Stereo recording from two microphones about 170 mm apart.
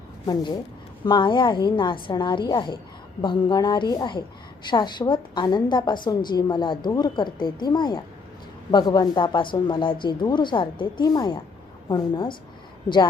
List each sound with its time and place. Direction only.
0.3 s speech: 20° left (ahead or behind)